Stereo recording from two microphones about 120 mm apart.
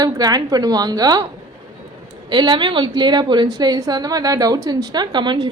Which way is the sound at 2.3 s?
40° right (ahead or behind).